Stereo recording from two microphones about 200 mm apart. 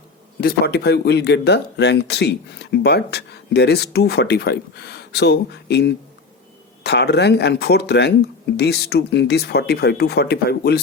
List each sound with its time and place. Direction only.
0.4 s speech: 55° left (ahead or behind)